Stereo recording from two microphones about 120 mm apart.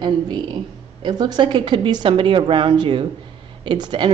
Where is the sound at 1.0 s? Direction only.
35° right (ahead or behind).